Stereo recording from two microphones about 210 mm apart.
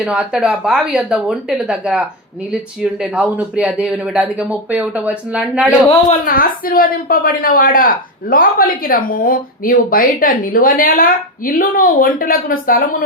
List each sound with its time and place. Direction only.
0.0 s speech: 5° right (ahead or behind)
5.9 s a woman's voice: 35° left (ahead or behind)